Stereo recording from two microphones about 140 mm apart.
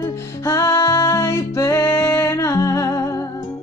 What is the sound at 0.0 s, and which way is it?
Music, 20° left (ahead or behind).